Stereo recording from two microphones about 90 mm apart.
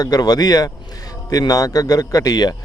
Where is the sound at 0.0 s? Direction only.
45° left (ahead or behind).